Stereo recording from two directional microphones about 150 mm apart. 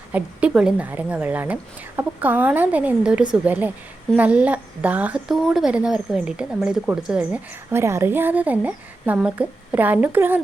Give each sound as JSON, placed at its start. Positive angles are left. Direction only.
{"t": 0.1, "sound": "a woman's voice", "side_deg": -10}